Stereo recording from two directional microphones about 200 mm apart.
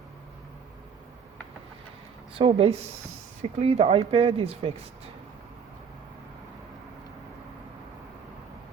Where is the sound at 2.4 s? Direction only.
30° right (ahead or behind).